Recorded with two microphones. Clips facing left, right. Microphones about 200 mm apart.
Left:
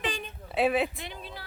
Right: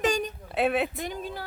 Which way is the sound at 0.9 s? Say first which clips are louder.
Right 8 dB; 45° right (ahead or behind).